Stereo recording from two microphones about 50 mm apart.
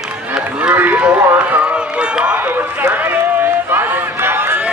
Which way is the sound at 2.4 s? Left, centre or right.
Right.